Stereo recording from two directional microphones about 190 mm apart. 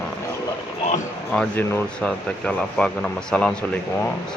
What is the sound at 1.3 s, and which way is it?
Speech, 10° left (ahead or behind).